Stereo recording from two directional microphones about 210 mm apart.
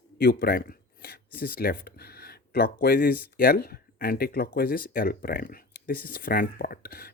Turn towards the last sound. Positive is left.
turn(degrees=45)  # may be behind; listen again after turning